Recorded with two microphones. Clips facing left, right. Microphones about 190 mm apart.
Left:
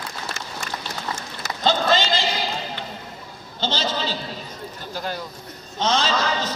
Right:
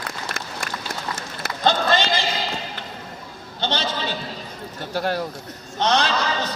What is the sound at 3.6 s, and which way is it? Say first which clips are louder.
A man's voice: even; 60° right (ahead or behind).